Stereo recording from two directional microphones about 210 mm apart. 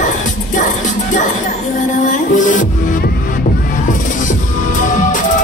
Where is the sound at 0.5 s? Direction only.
40° left (ahead or behind).